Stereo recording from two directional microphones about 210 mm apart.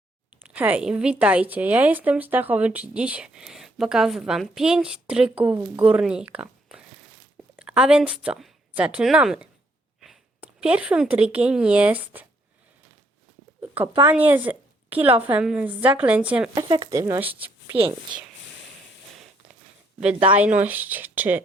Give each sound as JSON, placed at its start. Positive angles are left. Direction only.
{"t": 0.4, "sound": "a woman's voice", "side_deg": -5}
{"t": 13.8, "sound": "speech", "side_deg": -20}
{"t": 14.1, "sound": "speech", "side_deg": -10}
{"t": 16.6, "sound": "speech", "side_deg": -20}
{"t": 17.7, "sound": "speech", "side_deg": -25}
{"t": 20.3, "sound": "speech", "side_deg": -5}